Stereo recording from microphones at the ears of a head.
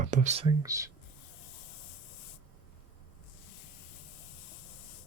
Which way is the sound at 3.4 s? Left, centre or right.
Left.